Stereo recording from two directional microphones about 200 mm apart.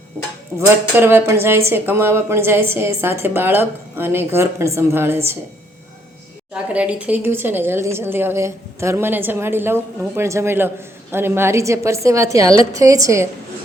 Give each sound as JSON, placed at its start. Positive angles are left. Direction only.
{"t": 0.7, "sound": "speech", "side_deg": -10}
{"t": 6.5, "sound": "speech", "side_deg": -5}